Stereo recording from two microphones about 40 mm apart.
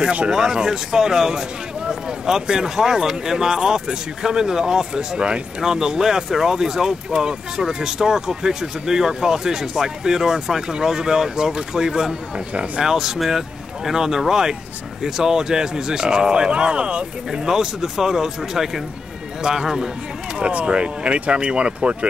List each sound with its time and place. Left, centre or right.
0.0 s speech: right
0.3 s speech: centre
20.3 s speech: right